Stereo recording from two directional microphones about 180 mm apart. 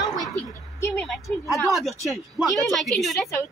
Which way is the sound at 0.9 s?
Centre (ahead or behind).